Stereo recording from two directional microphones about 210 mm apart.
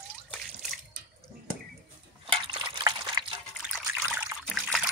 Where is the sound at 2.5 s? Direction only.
20° right (ahead or behind).